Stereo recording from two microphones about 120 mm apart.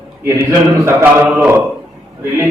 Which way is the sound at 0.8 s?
15° right (ahead or behind).